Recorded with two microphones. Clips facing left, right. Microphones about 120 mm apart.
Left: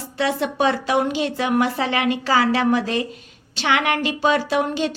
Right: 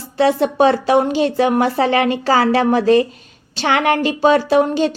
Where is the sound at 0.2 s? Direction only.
35° right (ahead or behind).